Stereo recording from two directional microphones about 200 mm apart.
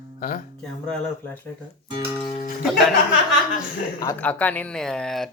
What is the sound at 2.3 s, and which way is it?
Speech, 40° left (ahead or behind).